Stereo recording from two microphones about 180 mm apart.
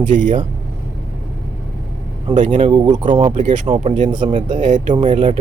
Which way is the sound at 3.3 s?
45° right (ahead or behind).